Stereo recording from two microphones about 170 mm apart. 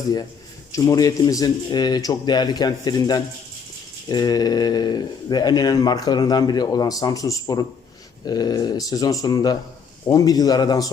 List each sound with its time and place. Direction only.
0.7 s speech: 20° left (ahead or behind)